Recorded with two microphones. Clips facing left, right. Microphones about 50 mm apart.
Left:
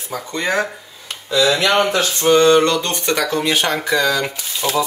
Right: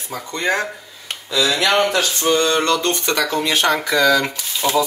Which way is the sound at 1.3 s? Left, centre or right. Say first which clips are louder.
Left 2 dB; left.